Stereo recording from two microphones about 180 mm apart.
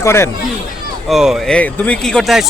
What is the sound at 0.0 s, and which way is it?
Speech, 15° left (ahead or behind).